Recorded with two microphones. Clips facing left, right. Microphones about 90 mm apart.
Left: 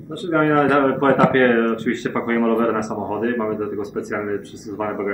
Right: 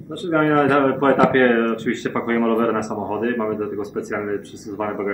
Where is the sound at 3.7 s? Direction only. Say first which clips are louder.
Even; 10° left (ahead or behind).